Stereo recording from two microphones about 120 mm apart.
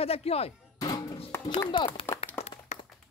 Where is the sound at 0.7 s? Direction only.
35° left (ahead or behind).